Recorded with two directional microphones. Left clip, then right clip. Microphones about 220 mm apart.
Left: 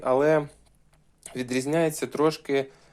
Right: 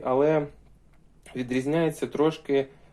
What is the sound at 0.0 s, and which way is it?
Speech, 35° left (ahead or behind).